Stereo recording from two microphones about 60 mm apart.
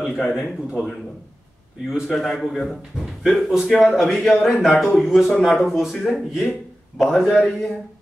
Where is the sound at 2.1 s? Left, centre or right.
Centre.